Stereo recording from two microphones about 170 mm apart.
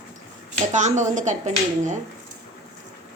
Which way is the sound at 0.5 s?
45° right (ahead or behind).